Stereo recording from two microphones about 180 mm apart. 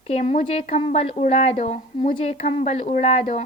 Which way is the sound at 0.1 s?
35° left (ahead or behind).